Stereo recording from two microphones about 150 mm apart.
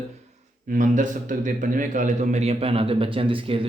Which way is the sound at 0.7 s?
60° right (ahead or behind).